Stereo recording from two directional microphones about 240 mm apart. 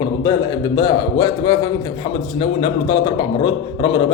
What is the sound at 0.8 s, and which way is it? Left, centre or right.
A man's voice, centre.